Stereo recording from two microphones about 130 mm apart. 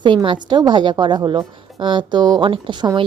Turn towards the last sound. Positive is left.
turn(degrees=-35)  # may be behind; listen again after turning